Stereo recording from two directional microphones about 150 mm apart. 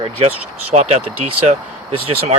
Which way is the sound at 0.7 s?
45° right (ahead or behind).